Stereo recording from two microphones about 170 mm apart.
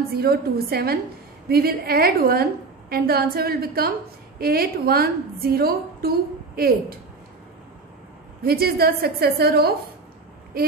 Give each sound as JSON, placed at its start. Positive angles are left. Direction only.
{"t": 0.1, "sound": "a woman's voice", "side_deg": -65}
{"t": 8.4, "sound": "a woman's voice", "side_deg": -65}